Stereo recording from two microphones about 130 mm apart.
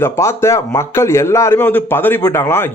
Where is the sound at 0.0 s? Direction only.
20° left (ahead or behind).